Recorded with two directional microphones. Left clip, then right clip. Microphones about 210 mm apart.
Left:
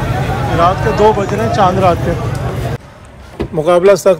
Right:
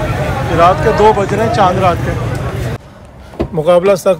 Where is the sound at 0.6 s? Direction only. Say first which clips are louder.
Right 2 dB; 15° left (ahead or behind).